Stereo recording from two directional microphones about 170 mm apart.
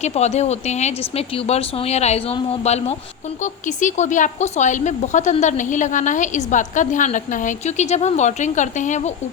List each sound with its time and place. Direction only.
0.0 s speech: 40° left (ahead or behind)